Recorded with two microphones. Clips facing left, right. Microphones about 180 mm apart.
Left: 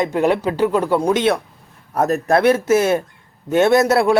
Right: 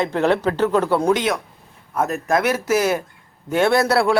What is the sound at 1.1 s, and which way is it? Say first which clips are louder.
A man's voice: left 5 dB; 30° left (ahead or behind).